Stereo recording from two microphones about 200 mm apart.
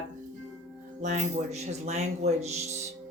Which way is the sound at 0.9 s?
35° right (ahead or behind).